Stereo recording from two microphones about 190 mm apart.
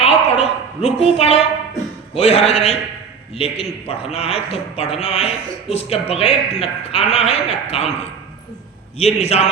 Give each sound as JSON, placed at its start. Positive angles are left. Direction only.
{"t": 0.0, "sound": "a sound", "side_deg": 35}
{"t": 2.1, "sound": "a man's voice", "side_deg": 30}
{"t": 9.0, "sound": "a man's voice", "side_deg": 35}